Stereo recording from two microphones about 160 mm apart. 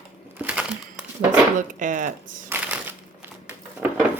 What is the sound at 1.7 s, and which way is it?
Speech, 55° right (ahead or behind).